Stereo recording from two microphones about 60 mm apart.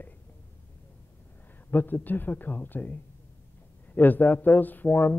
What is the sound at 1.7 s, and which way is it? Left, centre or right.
A man's voice, left.